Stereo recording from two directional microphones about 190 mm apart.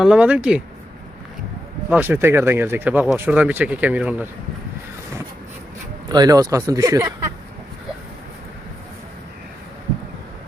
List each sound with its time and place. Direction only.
0.0 s speech: 5° right (ahead or behind)
1.9 s speech: 10° right (ahead or behind)
6.1 s speech: 20° right (ahead or behind)